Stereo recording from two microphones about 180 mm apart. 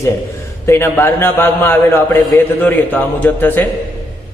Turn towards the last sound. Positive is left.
turn(degrees=10)  # may be behind; listen again after turning